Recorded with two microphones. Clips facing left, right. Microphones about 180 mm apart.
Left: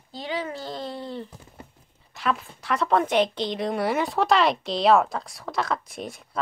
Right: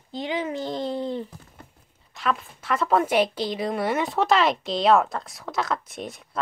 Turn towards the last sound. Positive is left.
turn(degrees=0)  # may be behind; listen again after turning